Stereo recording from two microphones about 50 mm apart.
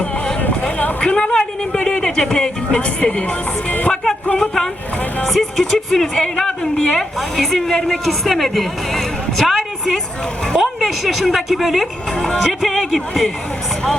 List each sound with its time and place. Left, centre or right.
1.0 s speech: centre
4.4 s a woman's voice: centre